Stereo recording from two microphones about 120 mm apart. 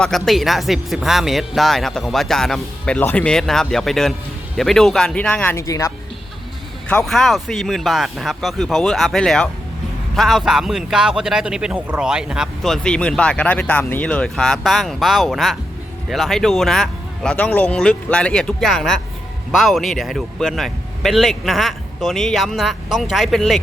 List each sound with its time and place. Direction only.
0.0 s speech: 5° left (ahead or behind)
5.6 s a woman's voice: 25° left (ahead or behind)
7.0 s speech: centre (ahead or behind)
12.6 s speech: 5° left (ahead or behind)